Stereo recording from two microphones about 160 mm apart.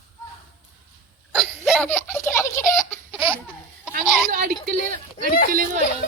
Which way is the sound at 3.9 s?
60° right (ahead or behind).